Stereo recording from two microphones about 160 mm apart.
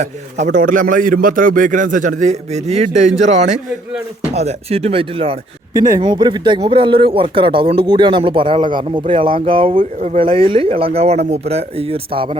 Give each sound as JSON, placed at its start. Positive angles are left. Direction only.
{"t": 0.5, "sound": "a man's voice", "side_deg": -55}
{"t": 5.7, "sound": "speech", "side_deg": -20}